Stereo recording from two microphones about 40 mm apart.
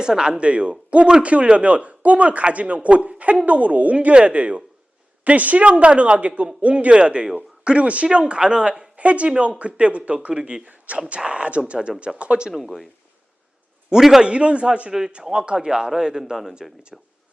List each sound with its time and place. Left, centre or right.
0.0 s speech: right
8.0 s speech: right
9.0 s speech: right
10.7 s speech: right
12.5 s a man's voice: centre
13.9 s a man's voice: centre
14.2 s a man's voice: right; by 16.6 s centre
16.9 s speech: centre